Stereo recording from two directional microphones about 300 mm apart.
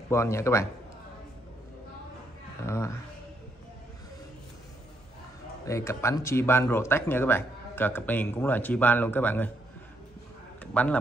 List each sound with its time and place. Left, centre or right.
0.1 s speech: centre
2.6 s speech: centre
5.7 s speech: centre
10.6 s a man's voice: centre